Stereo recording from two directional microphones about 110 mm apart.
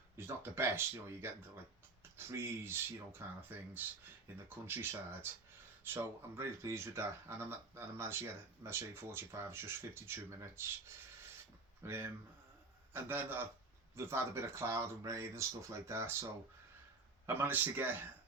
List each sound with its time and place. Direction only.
0.2 s speech: 20° right (ahead or behind)
17.2 s speech: 20° right (ahead or behind)